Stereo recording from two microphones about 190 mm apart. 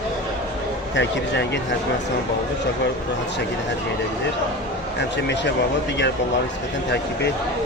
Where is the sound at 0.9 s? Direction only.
65° left (ahead or behind).